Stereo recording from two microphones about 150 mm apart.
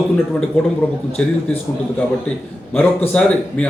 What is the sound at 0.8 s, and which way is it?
Speech, 10° left (ahead or behind).